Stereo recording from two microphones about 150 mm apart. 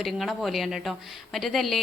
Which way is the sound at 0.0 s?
Centre (ahead or behind).